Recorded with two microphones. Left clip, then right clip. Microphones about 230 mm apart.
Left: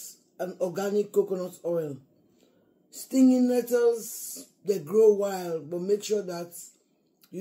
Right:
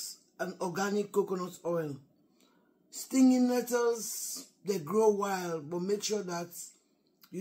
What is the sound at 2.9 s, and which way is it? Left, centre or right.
Speech, centre.